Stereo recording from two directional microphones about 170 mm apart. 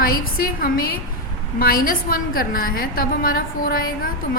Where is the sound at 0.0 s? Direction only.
60° left (ahead or behind).